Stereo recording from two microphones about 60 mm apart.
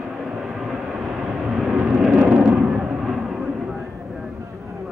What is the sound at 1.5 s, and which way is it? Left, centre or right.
Vehicle, centre.